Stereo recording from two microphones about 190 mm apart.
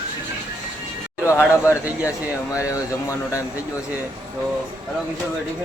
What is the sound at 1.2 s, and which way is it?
Speech, 15° left (ahead or behind).